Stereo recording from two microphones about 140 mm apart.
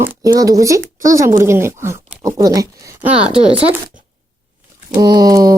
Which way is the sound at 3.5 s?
40° right (ahead or behind).